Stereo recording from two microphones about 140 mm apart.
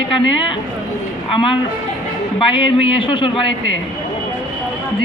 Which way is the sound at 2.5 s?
40° left (ahead or behind).